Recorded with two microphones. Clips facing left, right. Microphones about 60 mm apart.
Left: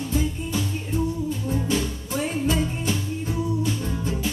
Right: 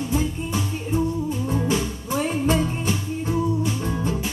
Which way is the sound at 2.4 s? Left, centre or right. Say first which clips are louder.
Right 2 dB; right.